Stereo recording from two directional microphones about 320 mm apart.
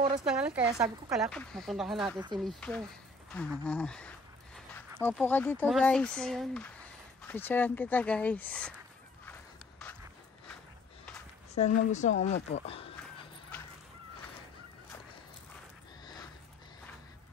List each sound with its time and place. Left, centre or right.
0.2 s speech: centre
9.2 s a sound: centre
11.5 s speech: left